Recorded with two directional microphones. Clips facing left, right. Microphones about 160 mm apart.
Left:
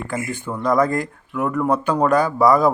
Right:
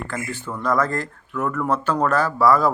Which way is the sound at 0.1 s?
15° left (ahead or behind).